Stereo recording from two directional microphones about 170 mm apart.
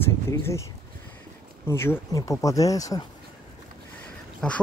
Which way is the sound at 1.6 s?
15° left (ahead or behind).